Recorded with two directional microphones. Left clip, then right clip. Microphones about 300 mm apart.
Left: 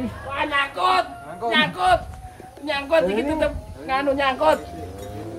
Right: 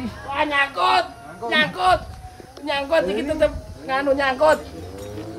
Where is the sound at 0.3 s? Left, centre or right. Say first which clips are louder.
Right 3 dB; right.